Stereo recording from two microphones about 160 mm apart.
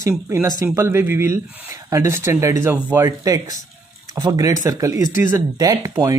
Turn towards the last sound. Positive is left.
turn(degrees=-20)  # may be behind; listen again after turning